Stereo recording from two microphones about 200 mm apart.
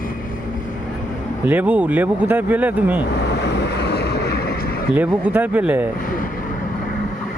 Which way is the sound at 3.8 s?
55° left (ahead or behind).